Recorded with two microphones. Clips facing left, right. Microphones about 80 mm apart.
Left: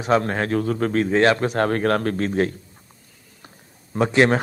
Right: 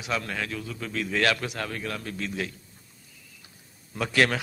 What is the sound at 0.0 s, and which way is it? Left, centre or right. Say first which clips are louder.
A man's voice: left 11 dB; left.